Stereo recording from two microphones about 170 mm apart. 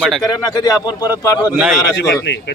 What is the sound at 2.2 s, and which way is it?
Speech, 85° left.